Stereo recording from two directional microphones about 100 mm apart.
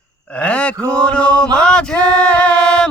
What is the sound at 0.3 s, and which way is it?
Mantra, 10° left (ahead or behind).